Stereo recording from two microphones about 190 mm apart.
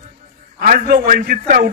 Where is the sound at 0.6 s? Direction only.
50° right (ahead or behind).